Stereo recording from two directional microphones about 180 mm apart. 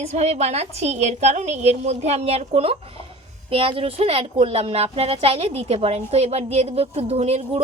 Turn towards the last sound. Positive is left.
turn(degrees=-35)  # may be behind; listen again after turning